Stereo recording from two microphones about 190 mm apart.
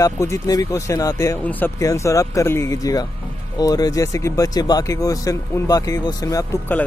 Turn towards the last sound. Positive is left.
turn(degrees=10)  # may be behind; listen again after turning